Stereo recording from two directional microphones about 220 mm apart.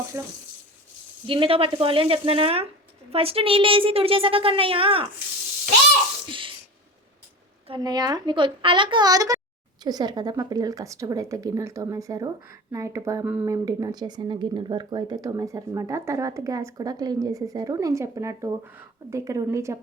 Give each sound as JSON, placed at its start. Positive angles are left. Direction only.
{"t": 0.1, "sound": "a woman's voice", "side_deg": -10}
{"t": 1.3, "sound": "a woman's voice", "side_deg": -25}
{"t": 6.2, "sound": "sneeze", "side_deg": -25}
{"t": 7.7, "sound": "a woman's voice", "side_deg": -20}